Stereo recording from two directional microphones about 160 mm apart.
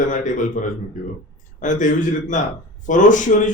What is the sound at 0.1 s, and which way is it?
Speech, 55° left (ahead or behind).